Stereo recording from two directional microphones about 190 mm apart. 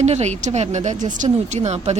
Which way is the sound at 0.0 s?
35° right (ahead or behind).